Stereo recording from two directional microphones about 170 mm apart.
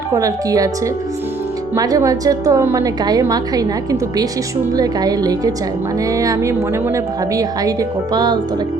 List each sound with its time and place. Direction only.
0.1 s a woman's voice: 20° right (ahead or behind)
1.7 s a woman's voice: 20° right (ahead or behind)
4.7 s a woman's voice: 20° right (ahead or behind)